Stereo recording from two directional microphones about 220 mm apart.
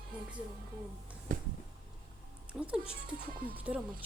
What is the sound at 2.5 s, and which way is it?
Speech, 5° right (ahead or behind).